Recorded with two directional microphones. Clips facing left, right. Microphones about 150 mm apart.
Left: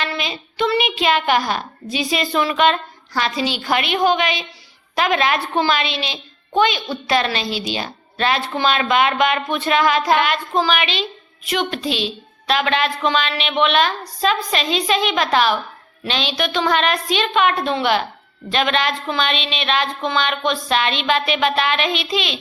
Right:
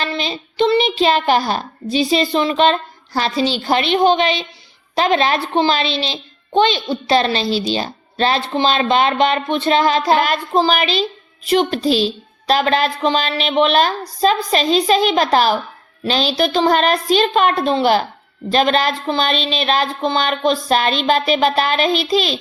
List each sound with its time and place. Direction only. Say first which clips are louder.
0.0 s a woman's voice: right 3 dB; 30° right (ahead or behind)